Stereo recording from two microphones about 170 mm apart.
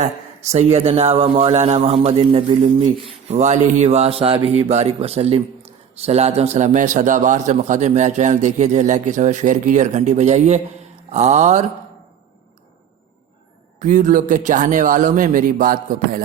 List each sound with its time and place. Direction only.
0.5 s a man's voice: 40° right (ahead or behind)
13.7 s a man's voice: 45° right (ahead or behind)